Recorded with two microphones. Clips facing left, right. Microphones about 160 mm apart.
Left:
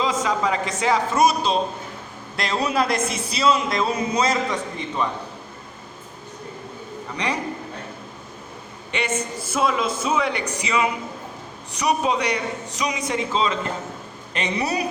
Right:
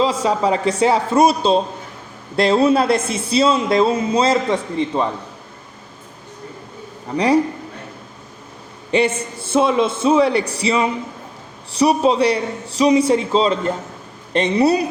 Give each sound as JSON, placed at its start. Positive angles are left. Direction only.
{"t": 0.0, "sound": "a man's voice", "side_deg": -30}
{"t": 8.9, "sound": "a man's voice", "side_deg": -30}